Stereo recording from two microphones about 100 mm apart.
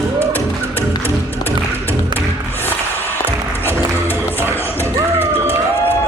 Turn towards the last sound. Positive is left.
turn(degrees=-25)  # may be behind; listen again after turning